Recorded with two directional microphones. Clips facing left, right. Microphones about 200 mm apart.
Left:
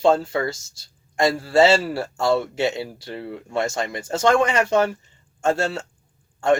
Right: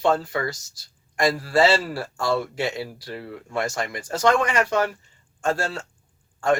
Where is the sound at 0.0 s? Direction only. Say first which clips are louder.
Left 4 dB; 25° left (ahead or behind).